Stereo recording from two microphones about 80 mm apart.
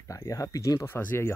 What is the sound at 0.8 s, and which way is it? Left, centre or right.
Speech, left.